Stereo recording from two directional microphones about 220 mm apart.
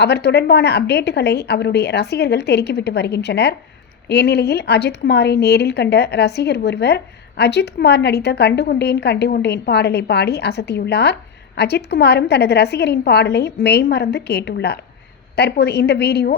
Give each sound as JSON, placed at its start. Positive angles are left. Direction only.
{"t": 0.0, "sound": "speech", "side_deg": 50}